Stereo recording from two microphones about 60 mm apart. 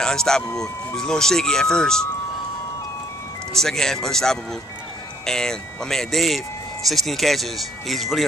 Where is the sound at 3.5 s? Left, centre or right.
Centre.